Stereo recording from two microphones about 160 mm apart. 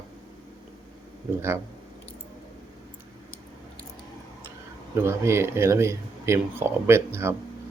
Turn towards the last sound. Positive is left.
turn(degrees=-15)  # may be behind; listen again after turning